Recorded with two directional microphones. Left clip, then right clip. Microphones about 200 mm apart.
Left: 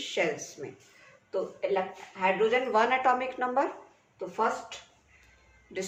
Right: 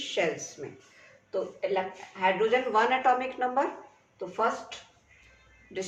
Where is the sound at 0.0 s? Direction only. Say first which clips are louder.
Right 1 dB; 25° left (ahead or behind).